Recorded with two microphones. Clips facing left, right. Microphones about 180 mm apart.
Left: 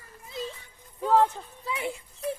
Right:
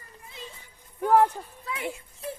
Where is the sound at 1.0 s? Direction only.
10° right (ahead or behind).